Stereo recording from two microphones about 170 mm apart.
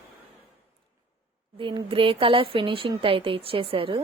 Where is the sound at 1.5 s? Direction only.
30° right (ahead or behind).